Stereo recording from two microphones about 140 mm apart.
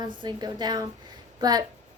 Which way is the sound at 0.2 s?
30° right (ahead or behind).